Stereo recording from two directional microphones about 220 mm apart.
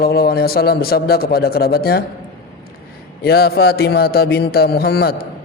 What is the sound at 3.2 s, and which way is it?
Speech, 45° left (ahead or behind).